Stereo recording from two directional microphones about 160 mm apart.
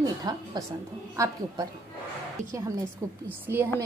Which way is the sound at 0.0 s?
20° right (ahead or behind).